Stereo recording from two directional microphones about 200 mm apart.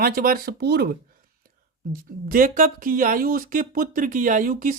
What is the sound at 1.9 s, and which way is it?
Speech, 45° right (ahead or behind).